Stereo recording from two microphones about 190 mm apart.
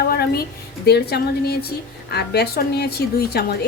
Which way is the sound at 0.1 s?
55° left (ahead or behind).